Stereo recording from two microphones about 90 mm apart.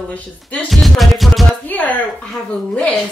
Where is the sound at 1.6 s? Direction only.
20° left (ahead or behind).